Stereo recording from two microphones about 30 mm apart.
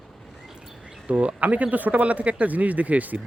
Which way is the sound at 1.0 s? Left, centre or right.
Right.